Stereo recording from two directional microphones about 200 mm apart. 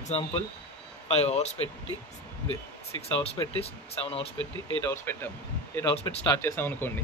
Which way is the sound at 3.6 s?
30° left (ahead or behind).